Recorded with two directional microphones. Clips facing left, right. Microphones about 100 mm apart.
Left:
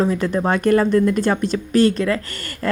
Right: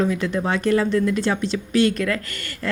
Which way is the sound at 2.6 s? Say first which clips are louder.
Left 4 dB; 45° left (ahead or behind).